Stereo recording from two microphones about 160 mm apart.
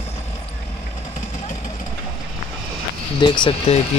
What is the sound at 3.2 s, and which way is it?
Speech, 30° left (ahead or behind).